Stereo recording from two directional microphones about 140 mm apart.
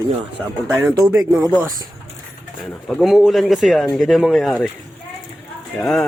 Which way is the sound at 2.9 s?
Centre (ahead or behind).